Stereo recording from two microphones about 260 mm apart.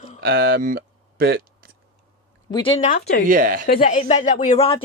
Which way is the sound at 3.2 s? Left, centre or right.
Right.